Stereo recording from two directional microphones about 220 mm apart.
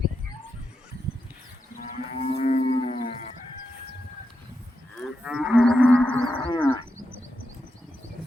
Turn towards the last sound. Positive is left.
turn(degrees=15)  # may be behind; listen again after turning